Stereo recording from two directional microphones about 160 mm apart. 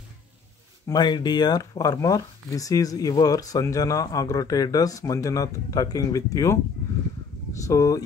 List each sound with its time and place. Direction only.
0.8 s speech: 25° left (ahead or behind)
7.6 s speech: 20° left (ahead or behind)